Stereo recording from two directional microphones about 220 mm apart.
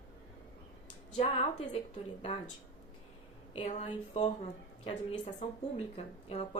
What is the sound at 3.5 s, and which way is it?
Speech, 30° left (ahead or behind).